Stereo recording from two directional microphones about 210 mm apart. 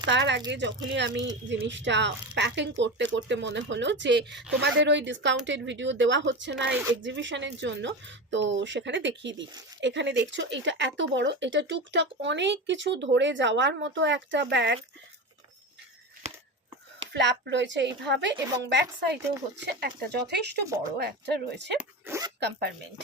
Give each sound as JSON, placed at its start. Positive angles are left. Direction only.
{"t": 0.0, "sound": "speech", "side_deg": -55}
{"t": 17.2, "sound": "speech", "side_deg": -55}
{"t": 20.7, "sound": "speech", "side_deg": -15}
{"t": 21.0, "sound": "speech", "side_deg": -50}
{"t": 21.8, "sound": "speech", "side_deg": -10}
{"t": 22.4, "sound": "speech", "side_deg": -55}